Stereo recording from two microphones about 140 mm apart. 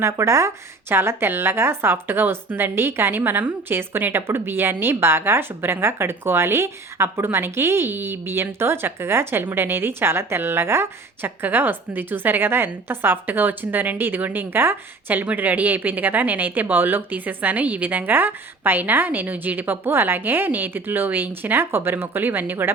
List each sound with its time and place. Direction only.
0.0 s a woman's voice: 20° right (ahead or behind)